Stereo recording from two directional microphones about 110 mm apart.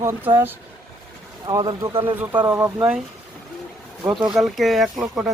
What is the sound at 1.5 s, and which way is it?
Speech, 40° right (ahead or behind).